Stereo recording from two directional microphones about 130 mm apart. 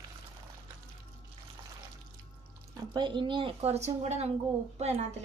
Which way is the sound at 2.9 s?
35° right (ahead or behind).